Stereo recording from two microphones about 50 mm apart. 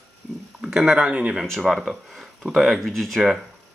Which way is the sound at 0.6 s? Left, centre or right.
Centre.